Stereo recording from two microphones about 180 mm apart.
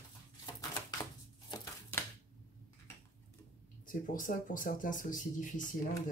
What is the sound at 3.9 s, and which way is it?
Speech, 50° left (ahead or behind).